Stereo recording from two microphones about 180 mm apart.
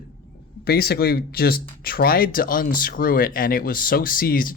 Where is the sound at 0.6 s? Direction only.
60° left (ahead or behind).